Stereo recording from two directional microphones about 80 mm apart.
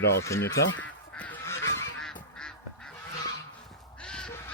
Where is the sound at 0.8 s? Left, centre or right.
Centre.